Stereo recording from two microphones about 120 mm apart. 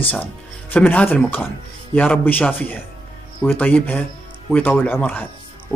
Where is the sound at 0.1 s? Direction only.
15° left (ahead or behind).